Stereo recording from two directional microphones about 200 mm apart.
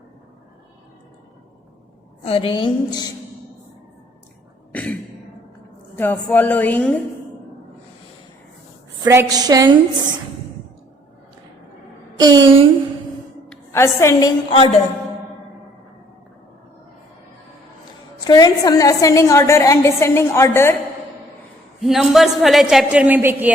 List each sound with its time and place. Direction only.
2.2 s a woman's voice: 30° left (ahead or behind)
4.7 s a sound: 5° left (ahead or behind)
6.0 s a woman's voice: 10° left (ahead or behind)
9.3 s a woman's voice: 20° right (ahead or behind)
12.2 s a woman's voice: 20° right (ahead or behind)
13.5 s a woman's voice: 10° left (ahead or behind); by 14.8 s 30° left (ahead or behind)
18.3 s a woman's voice: 20° left (ahead or behind)
21.8 s a woman's voice: centre (ahead or behind)